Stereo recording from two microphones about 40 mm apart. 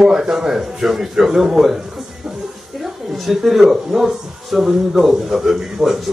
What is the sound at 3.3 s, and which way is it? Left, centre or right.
A man's voice, centre.